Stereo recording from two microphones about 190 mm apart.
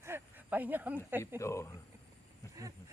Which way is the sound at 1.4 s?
15° left (ahead or behind).